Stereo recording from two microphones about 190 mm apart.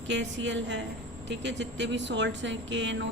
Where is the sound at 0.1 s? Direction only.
75° right (ahead or behind).